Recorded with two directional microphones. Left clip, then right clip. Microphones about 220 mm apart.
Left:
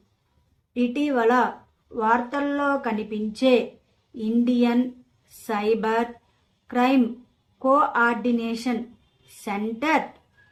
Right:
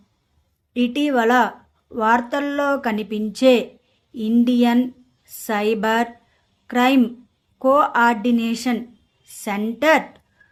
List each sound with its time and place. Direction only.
0.7 s speech: 45° right (ahead or behind)